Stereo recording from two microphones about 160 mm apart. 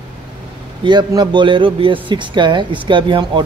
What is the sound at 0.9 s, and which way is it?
A man's voice, 30° right (ahead or behind).